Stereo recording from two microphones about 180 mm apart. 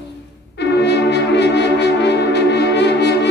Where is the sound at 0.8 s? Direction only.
70° left (ahead or behind).